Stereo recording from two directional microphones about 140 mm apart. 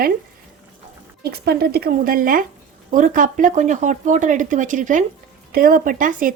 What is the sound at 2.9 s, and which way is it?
Speech, 70° right (ahead or behind).